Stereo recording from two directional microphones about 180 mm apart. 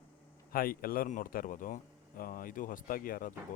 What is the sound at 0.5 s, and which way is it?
Speech, 55° left (ahead or behind).